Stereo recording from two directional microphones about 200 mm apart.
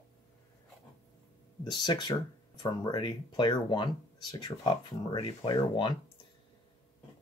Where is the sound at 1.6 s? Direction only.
20° left (ahead or behind).